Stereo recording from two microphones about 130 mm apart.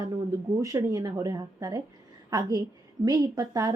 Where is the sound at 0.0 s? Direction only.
25° right (ahead or behind).